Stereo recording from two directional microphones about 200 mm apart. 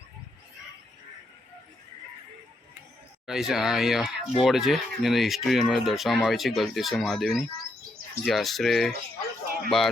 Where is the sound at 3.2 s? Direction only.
Centre (ahead or behind).